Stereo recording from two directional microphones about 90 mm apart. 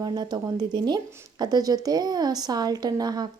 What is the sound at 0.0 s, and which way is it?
Speech, 50° right (ahead or behind).